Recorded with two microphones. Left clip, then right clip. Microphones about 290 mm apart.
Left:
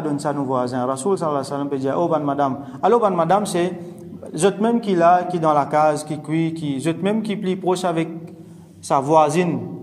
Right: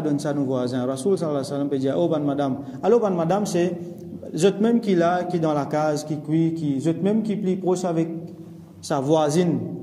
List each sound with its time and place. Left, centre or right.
0.0 s speech: centre